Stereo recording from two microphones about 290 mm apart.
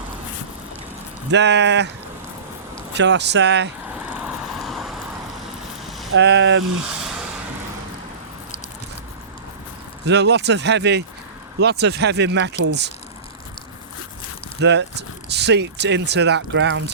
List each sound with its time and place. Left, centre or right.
1.3 s speech: right
2.9 s speech: right
3.9 s vehicle: centre
6.1 s speech: right
10.1 s speech: right
14.6 s speech: right